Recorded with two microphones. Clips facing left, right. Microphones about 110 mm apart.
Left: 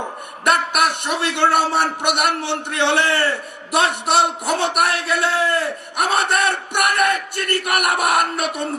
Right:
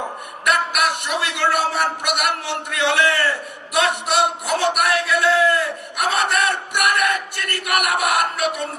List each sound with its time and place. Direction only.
0.4 s a man's voice: 30° left (ahead or behind)